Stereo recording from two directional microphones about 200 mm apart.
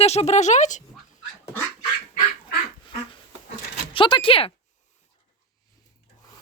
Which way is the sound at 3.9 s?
25° left (ahead or behind).